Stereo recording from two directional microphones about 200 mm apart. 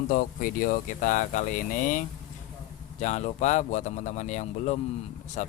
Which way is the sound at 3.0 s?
35° left (ahead or behind).